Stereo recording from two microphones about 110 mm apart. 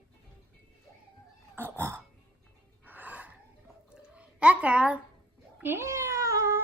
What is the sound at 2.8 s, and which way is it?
Gasp, 15° right (ahead or behind).